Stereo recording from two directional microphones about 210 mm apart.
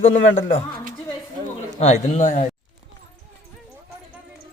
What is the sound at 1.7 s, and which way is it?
Speech, 30° left (ahead or behind).